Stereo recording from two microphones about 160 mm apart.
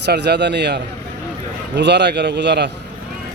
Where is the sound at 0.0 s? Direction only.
90° right.